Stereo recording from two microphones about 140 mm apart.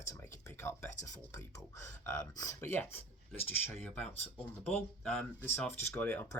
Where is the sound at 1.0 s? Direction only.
20° left (ahead or behind).